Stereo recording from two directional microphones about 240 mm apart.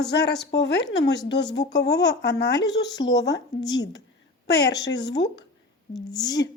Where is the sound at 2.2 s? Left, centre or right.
Left.